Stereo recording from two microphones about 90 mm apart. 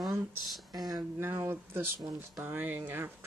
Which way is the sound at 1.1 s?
25° right (ahead or behind).